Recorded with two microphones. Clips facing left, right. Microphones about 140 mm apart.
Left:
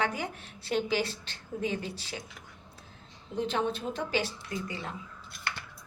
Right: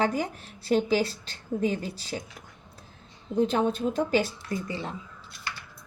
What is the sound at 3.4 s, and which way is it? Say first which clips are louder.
A woman's voice: right 6 dB; 45° right (ahead or behind).